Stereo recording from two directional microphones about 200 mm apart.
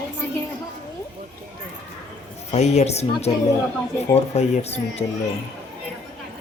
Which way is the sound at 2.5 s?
35° left (ahead or behind).